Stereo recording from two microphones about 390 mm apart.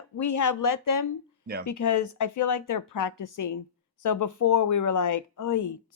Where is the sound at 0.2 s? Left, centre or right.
Left.